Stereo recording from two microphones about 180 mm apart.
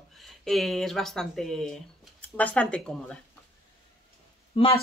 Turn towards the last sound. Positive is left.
turn(degrees=30)  # may be behind; listen again after turning